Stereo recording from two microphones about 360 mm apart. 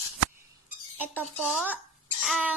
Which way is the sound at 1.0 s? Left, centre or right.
Centre.